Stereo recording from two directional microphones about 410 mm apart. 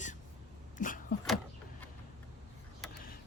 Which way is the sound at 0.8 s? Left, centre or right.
Centre.